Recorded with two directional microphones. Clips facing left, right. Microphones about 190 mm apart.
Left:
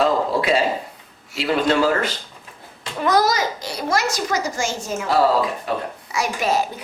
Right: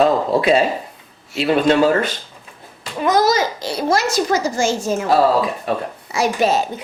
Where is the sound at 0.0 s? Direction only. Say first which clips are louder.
Right 4 dB; 25° right (ahead or behind).